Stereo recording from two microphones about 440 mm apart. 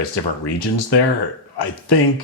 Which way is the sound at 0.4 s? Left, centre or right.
Left.